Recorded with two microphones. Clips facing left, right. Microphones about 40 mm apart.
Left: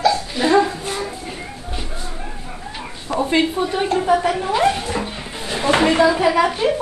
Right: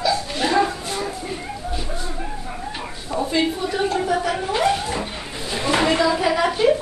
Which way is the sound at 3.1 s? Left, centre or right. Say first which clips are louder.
Left 3 dB; left.